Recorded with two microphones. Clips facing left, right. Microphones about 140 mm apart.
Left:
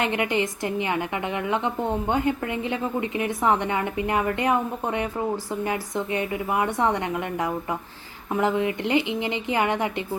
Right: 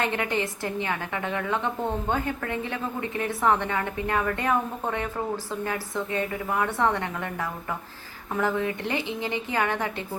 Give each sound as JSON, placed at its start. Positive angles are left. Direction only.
{"t": 0.0, "sound": "a woman's voice", "side_deg": 15}